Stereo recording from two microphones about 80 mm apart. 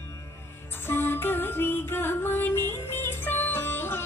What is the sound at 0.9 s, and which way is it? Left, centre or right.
Music, left.